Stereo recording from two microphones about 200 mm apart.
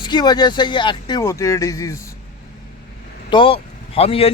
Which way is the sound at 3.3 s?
25° left (ahead or behind).